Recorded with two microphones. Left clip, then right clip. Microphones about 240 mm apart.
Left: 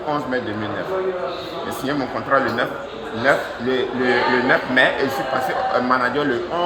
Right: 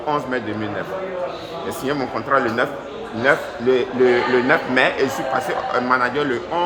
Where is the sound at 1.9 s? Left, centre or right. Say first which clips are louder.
Even; centre.